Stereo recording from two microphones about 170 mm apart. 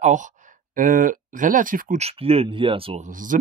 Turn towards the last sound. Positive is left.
turn(degrees=-50)  # may be behind; listen again after turning